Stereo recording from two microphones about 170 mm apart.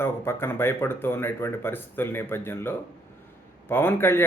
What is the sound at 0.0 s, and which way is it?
Speech, 15° left (ahead or behind).